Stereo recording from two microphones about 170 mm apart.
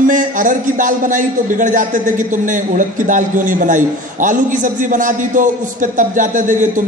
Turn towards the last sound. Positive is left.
turn(degrees=-50)  # may be behind; listen again after turning